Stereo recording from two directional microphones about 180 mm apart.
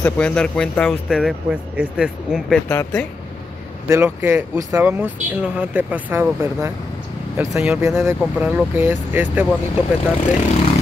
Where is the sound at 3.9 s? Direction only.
15° right (ahead or behind).